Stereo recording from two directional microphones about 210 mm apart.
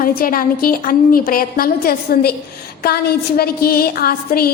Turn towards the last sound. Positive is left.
turn(degrees=45)  # may be behind; listen again after turning